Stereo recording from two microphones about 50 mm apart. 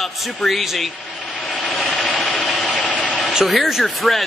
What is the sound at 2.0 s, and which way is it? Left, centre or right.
Engine, centre.